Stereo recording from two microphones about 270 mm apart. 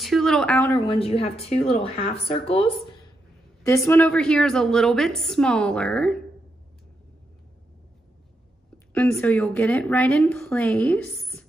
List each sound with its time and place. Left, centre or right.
0.0 s speech: centre
0.9 s speech: left
3.6 s a woman's voice: centre
8.9 s a woman's voice: centre